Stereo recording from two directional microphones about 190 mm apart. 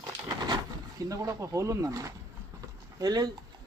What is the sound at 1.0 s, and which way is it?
Speech, 15° right (ahead or behind).